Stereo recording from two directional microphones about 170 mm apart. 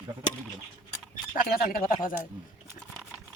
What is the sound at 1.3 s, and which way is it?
Speech, 60° left (ahead or behind).